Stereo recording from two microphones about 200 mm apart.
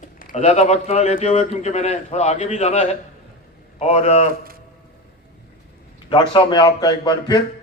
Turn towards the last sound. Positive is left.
turn(degrees=20)  # may be behind; listen again after turning